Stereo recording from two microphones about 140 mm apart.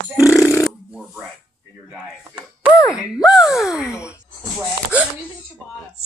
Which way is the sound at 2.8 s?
20° left (ahead or behind).